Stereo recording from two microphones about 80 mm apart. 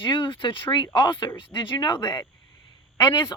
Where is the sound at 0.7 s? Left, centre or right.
Left.